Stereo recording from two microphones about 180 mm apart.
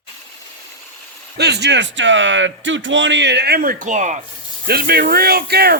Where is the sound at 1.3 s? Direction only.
70° right (ahead or behind); by 4.2 s 40° right (ahead or behind).